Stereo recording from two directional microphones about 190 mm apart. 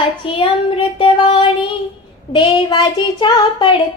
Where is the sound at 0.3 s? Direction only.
25° left (ahead or behind).